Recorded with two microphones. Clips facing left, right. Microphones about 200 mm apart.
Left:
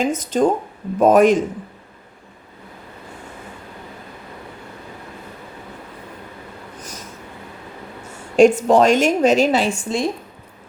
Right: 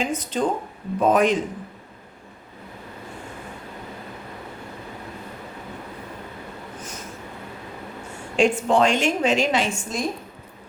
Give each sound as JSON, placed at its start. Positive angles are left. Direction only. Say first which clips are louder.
{"t": 0.0, "sound": "speech", "louder": "left 6 dB", "side_deg": 45}
{"t": 8.4, "sound": "a woman's voice", "louder": "left 7 dB", "side_deg": 40}